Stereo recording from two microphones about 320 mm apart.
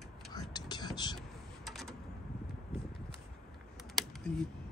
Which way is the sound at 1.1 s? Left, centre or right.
Centre.